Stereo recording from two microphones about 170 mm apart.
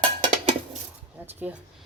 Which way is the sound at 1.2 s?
10° right (ahead or behind).